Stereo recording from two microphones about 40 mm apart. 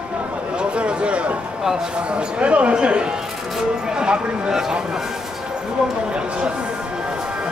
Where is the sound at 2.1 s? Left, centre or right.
Right.